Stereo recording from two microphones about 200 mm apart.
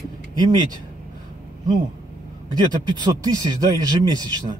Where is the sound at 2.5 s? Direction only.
20° right (ahead or behind).